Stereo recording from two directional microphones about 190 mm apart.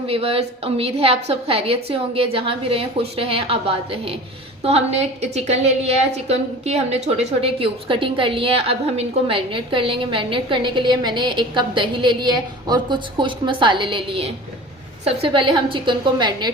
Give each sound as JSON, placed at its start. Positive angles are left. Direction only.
{"t": 0.1, "sound": "a woman's voice", "side_deg": -30}